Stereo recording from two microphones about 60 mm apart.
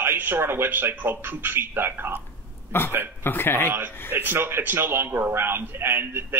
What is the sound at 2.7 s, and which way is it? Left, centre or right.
Speech, left.